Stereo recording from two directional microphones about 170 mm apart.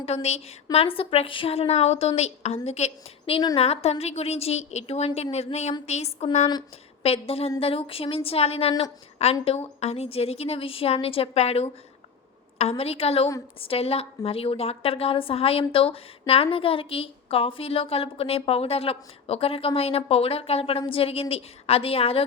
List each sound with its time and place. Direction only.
0.0 s a woman's voice: 40° left (ahead or behind)